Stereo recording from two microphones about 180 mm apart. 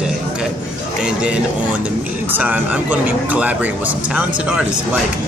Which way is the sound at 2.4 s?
10° right (ahead or behind).